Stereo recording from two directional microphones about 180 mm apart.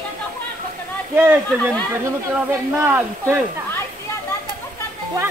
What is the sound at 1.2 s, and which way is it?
Speech, 10° right (ahead or behind).